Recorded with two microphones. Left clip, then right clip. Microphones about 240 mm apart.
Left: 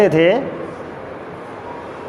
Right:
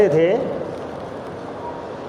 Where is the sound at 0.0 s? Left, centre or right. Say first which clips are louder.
Left 3 dB; left.